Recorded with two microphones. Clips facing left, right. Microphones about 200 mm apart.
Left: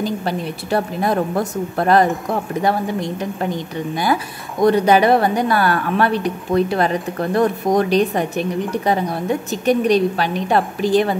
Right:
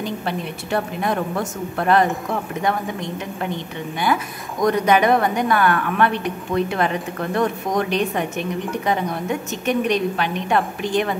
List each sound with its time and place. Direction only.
0.0 s a woman's voice: 35° left (ahead or behind)